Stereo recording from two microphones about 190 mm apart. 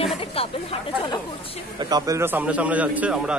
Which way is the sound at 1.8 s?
20° right (ahead or behind).